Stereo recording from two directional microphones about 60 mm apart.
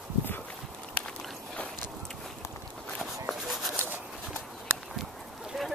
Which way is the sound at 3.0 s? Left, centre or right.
Centre.